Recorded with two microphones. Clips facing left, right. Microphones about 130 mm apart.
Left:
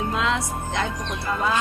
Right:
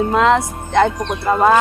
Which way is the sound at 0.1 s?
60° right (ahead or behind).